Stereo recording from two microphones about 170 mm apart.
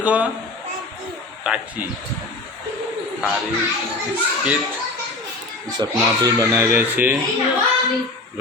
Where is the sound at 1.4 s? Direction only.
5° right (ahead or behind).